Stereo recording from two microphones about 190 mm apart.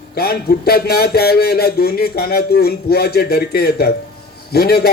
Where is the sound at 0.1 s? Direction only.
55° left (ahead or behind).